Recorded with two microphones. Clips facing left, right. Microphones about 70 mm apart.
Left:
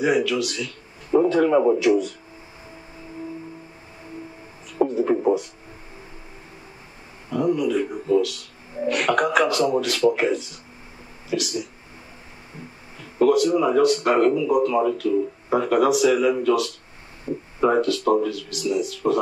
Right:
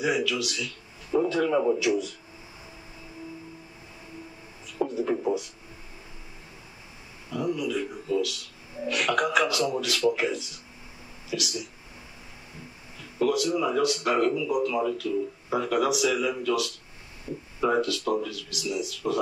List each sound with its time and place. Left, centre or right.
0.0 s speech: left
1.8 s speech: left
4.7 s a sound: left
7.2 s speech: left
13.2 s speech: left